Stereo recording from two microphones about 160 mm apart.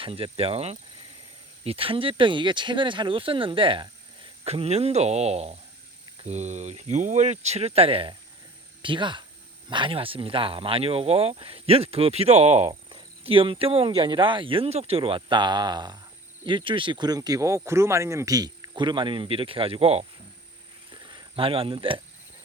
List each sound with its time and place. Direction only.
0.0 s speech: 35° right (ahead or behind)
20.9 s cricket: 30° right (ahead or behind)